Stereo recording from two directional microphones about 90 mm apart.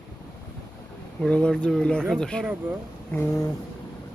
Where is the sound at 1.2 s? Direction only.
10° left (ahead or behind).